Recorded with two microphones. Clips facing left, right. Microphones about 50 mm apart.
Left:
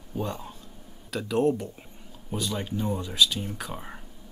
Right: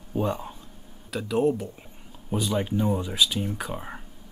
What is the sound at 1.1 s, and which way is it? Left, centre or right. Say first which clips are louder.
Speech: right 1 dB; centre.